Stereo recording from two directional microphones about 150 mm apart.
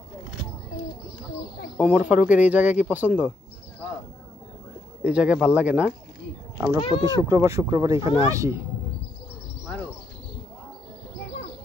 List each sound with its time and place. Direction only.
1.8 s speech: 10° right (ahead or behind)
5.0 s speech: 5° right (ahead or behind)
6.8 s speech: 30° left (ahead or behind)
7.2 s speech: 20° right (ahead or behind)